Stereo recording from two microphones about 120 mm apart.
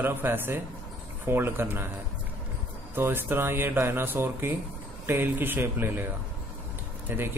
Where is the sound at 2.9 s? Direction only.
15° right (ahead or behind).